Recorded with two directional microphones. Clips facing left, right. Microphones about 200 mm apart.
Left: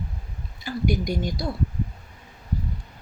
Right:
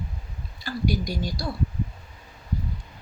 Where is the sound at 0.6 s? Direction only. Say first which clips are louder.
Left 2 dB; 20° left (ahead or behind).